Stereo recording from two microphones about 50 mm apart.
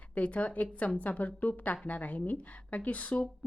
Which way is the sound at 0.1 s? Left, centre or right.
Left.